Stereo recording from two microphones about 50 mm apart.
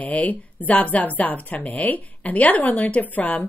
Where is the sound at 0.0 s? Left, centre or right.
Left.